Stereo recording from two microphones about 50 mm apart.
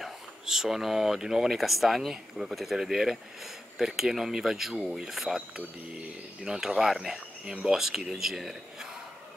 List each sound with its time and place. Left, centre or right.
0.0 s speech: centre
7.4 s speech: centre
7.7 s speech: centre